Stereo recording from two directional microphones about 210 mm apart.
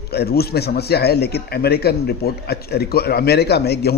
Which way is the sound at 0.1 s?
50° left (ahead or behind).